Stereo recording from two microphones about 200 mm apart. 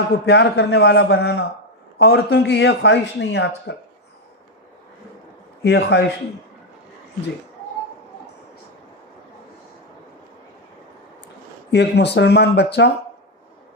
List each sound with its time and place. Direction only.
0.1 s speech: 55° left (ahead or behind)
5.6 s speech: 55° left (ahead or behind)
11.7 s speech: 60° left (ahead or behind)